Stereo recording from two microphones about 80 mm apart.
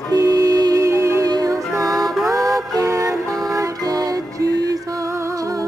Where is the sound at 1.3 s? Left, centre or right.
Right.